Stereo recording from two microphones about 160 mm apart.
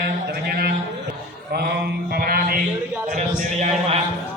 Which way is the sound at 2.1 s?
65° right (ahead or behind).